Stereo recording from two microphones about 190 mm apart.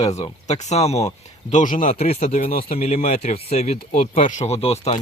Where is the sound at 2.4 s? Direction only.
50° left (ahead or behind).